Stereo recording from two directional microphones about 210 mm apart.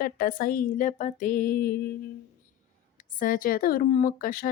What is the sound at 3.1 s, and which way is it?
A woman's voice, 40° left (ahead or behind).